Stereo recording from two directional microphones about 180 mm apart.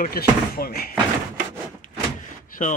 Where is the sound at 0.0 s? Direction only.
55° left (ahead or behind).